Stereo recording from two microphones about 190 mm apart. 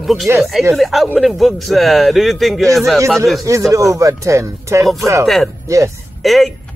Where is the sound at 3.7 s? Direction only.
15° right (ahead or behind).